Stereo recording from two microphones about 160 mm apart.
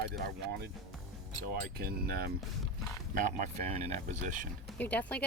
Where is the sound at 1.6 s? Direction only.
70° right (ahead or behind).